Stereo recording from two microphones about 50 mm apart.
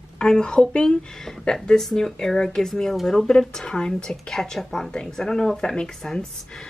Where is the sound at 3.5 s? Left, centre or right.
Centre.